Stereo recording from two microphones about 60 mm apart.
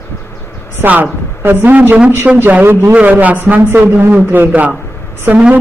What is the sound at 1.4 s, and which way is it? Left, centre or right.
Speech, right.